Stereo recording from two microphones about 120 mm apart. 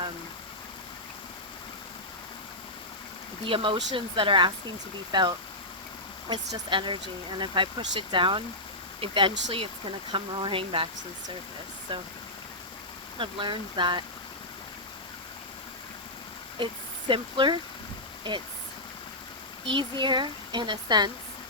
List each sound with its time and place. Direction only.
3.4 s speech: 45° right (ahead or behind)
6.7 s speech: 45° right (ahead or behind)
11.9 s speech: 45° right (ahead or behind)
13.1 s speech: 45° right (ahead or behind)
17.1 s speech: 40° right (ahead or behind)
19.6 s speech: 40° right (ahead or behind)